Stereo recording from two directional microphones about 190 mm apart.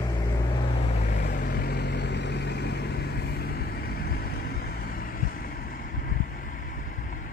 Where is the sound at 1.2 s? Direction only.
50° left (ahead or behind).